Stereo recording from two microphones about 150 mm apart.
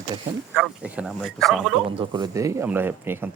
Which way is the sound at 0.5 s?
5° right (ahead or behind).